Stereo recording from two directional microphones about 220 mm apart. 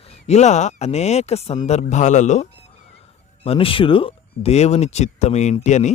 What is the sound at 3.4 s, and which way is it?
Speech, 25° left (ahead or behind).